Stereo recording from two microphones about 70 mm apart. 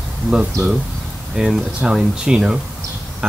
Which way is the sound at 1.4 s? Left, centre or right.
Centre.